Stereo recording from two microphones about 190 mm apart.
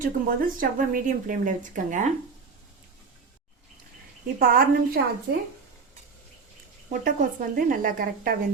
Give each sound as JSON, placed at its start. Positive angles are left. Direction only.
{"t": 0.0, "sound": "speech", "side_deg": -45}
{"t": 4.4, "sound": "speech", "side_deg": -50}
{"t": 7.0, "sound": "speech", "side_deg": -45}